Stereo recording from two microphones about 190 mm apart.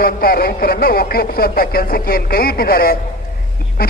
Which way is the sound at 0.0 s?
50° left (ahead or behind).